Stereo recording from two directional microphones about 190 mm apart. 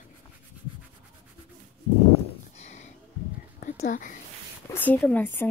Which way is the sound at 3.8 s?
45° left (ahead or behind).